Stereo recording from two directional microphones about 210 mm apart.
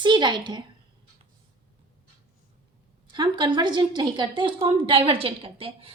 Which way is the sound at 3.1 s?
20° right (ahead or behind).